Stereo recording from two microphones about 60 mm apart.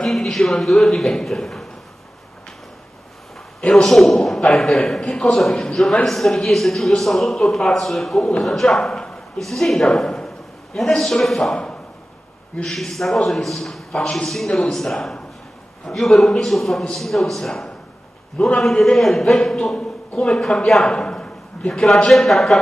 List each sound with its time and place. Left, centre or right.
0.1 s a man's voice: centre
3.6 s a man's voice: centre
6.0 s a man's voice: centre
8.5 s a man's voice: centre
11.5 s a sound: centre
12.6 s a man's voice: centre
20.9 s a sound: centre
21.8 s a man's voice: centre